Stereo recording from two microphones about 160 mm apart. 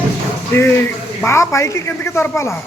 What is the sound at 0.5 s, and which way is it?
A man's voice, 15° left (ahead or behind).